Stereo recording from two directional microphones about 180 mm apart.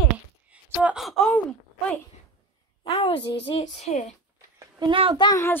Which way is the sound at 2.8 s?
25° left (ahead or behind).